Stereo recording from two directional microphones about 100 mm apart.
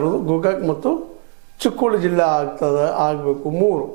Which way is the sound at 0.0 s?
20° right (ahead or behind).